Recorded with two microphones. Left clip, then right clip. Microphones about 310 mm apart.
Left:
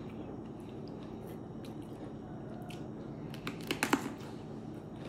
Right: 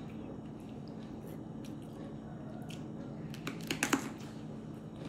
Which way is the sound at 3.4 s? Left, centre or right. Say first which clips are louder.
Left 1 dB; centre.